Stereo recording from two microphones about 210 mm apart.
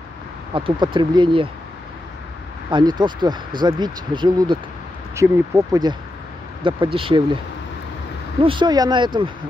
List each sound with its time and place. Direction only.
0.6 s speech: 25° right (ahead or behind)
2.7 s speech: 20° right (ahead or behind)
8.4 s speech: 25° right (ahead or behind)